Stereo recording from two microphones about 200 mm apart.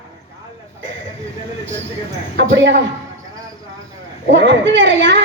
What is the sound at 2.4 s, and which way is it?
Speech, 60° right (ahead or behind).